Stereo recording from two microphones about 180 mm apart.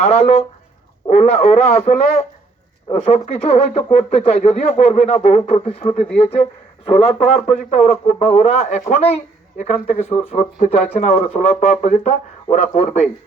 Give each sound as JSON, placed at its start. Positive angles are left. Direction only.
{"t": 0.0, "sound": "speech", "side_deg": 35}
{"t": 6.0, "sound": "speech", "side_deg": 5}
{"t": 6.8, "sound": "speech", "side_deg": 35}